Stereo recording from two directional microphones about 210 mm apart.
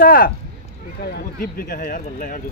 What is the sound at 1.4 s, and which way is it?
Speech, 40° left (ahead or behind).